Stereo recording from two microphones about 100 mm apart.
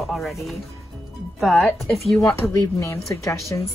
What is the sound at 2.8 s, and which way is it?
Speech, 30° left (ahead or behind).